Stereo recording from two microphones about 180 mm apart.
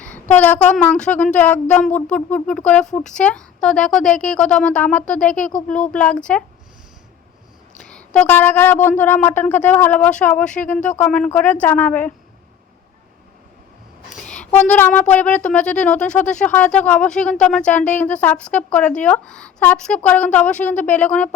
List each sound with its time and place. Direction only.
0.0 s a woman's voice: 10° left (ahead or behind)
7.9 s speech: 5° left (ahead or behind)
14.1 s speech: 5° left (ahead or behind)